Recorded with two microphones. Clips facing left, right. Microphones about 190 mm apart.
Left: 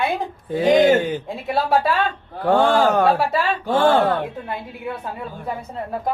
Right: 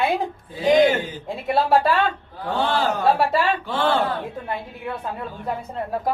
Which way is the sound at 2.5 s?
50° left (ahead or behind).